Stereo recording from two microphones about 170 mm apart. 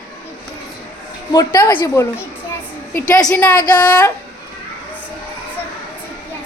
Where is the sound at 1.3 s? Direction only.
25° left (ahead or behind).